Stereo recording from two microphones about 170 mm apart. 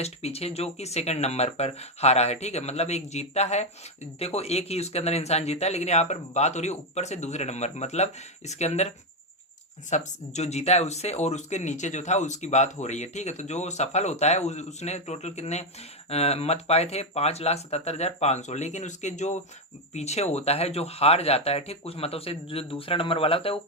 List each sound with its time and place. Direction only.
0.0 s speech: 35° left (ahead or behind)
9.9 s speech: 45° left (ahead or behind)